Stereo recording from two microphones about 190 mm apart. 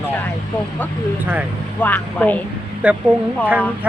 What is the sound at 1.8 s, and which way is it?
Speech, 10° left (ahead or behind).